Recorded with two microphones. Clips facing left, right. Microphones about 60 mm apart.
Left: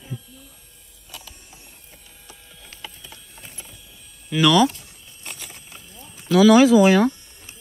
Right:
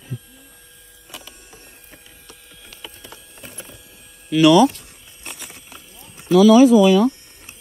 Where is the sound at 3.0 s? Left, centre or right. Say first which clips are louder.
Right 3 dB; right.